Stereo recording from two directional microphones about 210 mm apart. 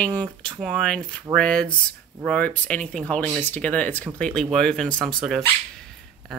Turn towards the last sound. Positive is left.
turn(degrees=0)  # may be behind; listen again after turning